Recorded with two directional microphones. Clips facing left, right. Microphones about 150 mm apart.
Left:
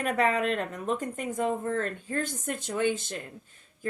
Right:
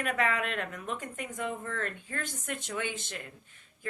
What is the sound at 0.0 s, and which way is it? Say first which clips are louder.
A woman's voice: left 5 dB; 35° left (ahead or behind).